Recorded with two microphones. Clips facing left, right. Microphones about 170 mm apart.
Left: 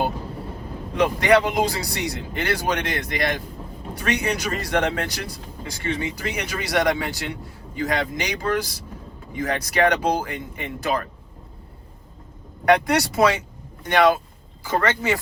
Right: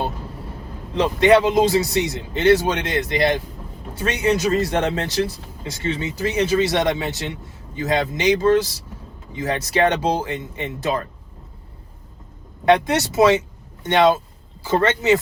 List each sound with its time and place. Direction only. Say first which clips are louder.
0.9 s speech: right 3 dB; 25° right (ahead or behind)
12.6 s speech: right 1 dB; 25° right (ahead or behind)